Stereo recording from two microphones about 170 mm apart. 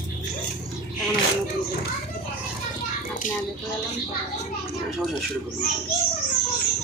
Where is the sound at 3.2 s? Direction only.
50° left (ahead or behind).